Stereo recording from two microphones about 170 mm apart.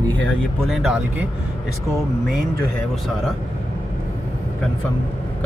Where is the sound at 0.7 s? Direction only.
Centre (ahead or behind).